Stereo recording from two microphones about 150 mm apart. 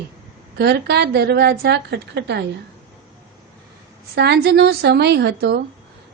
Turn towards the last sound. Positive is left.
turn(degrees=-90)